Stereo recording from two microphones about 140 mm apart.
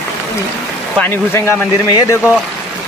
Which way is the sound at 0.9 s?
15° left (ahead or behind).